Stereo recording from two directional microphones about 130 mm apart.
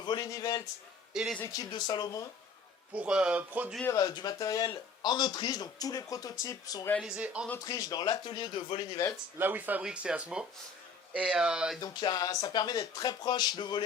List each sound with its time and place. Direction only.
0.0 s a man's voice: 35° left (ahead or behind)
1.1 s speech: 5° right (ahead or behind)
1.5 s speech: 30° left (ahead or behind)
2.9 s speech: 10° right (ahead or behind)
3.8 s speech: 30° left (ahead or behind)
7.0 s speech: 5° right (ahead or behind)
7.6 s speech: 30° left (ahead or behind)
8.9 s speech: 25° left (ahead or behind)
9.4 s speech: 15° right (ahead or behind)
11.8 s speech: 30° left (ahead or behind)